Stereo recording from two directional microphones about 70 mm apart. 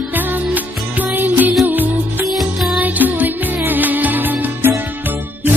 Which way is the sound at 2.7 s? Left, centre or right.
Right.